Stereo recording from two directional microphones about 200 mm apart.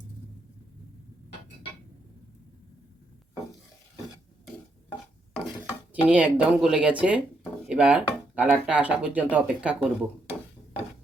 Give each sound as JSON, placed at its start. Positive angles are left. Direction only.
{"t": 5.9, "sound": "speech", "side_deg": -5}